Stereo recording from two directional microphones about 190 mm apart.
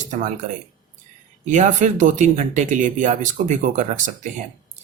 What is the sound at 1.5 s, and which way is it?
Speech, 40° right (ahead or behind).